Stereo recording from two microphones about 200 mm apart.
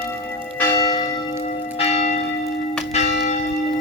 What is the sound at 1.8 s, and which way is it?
Church bell, 30° left (ahead or behind).